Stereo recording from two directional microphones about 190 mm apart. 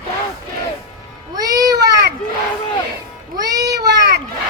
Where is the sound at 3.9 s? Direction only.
60° right (ahead or behind).